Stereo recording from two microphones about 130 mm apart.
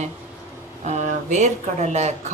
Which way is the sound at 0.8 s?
65° right (ahead or behind).